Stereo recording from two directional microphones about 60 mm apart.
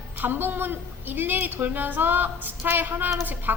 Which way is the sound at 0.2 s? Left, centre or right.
Right.